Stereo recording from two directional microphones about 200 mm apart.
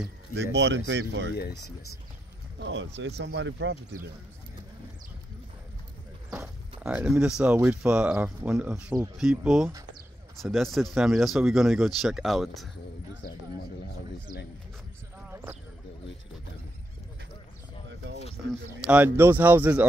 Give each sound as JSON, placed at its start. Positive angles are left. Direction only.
{"t": 0.6, "sound": "speech", "side_deg": -65}
{"t": 1.3, "sound": "speech", "side_deg": 55}
{"t": 2.6, "sound": "speech", "side_deg": -65}
{"t": 6.4, "sound": "speech", "side_deg": -5}
{"t": 18.5, "sound": "speech", "side_deg": -5}